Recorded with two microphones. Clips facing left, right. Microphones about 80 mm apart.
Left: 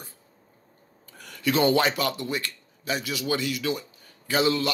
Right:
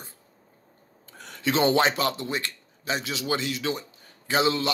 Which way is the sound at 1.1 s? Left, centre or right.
Right.